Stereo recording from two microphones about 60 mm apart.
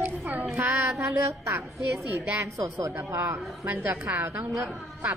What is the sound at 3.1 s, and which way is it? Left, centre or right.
A woman's voice, right.